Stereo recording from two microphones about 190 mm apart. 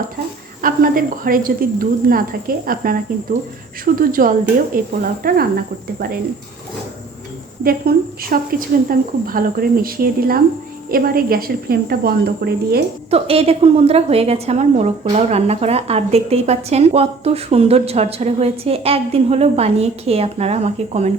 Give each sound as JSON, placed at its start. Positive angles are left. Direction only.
{"t": 0.6, "sound": "a woman's voice", "side_deg": -50}
{"t": 4.0, "sound": "a woman's voice", "side_deg": -45}
{"t": 7.6, "sound": "a woman's voice", "side_deg": -50}
{"t": 13.1, "sound": "a woman's voice", "side_deg": -30}